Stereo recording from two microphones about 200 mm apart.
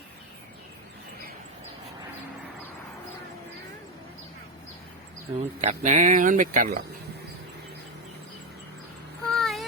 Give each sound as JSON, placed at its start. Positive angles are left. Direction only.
{"t": 5.4, "sound": "speech", "side_deg": -35}
{"t": 9.3, "sound": "child singing", "side_deg": 0}